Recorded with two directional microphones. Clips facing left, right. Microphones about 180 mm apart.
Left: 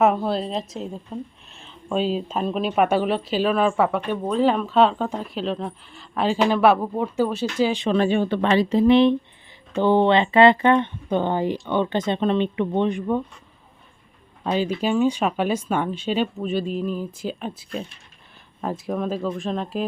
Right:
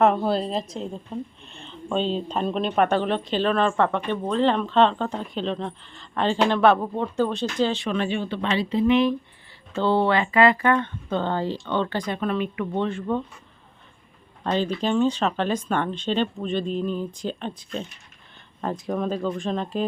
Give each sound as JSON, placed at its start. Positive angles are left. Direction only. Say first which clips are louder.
{"t": 0.0, "sound": "a woman's voice", "louder": "even", "side_deg": 0}
{"t": 7.9, "sound": "speech", "louder": "left 6 dB", "side_deg": 40}
{"t": 9.7, "sound": "speech", "louder": "left 4 dB", "side_deg": 15}
{"t": 14.4, "sound": "a woman's voice", "louder": "left 1 dB", "side_deg": 10}